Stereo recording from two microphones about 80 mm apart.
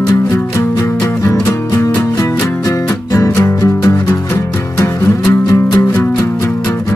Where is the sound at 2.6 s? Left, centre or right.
Left.